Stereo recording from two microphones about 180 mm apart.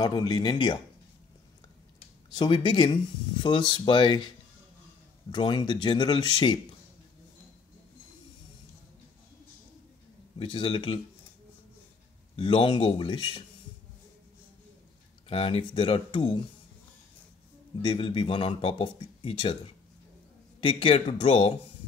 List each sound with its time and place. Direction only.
0.0 s speech: 20° left (ahead or behind)
2.3 s speech: 25° left (ahead or behind)
5.3 s speech: 25° left (ahead or behind)
10.4 s speech: 30° left (ahead or behind)
12.4 s speech: 30° left (ahead or behind)
15.2 s speech: 30° left (ahead or behind)
17.8 s speech: 30° left (ahead or behind)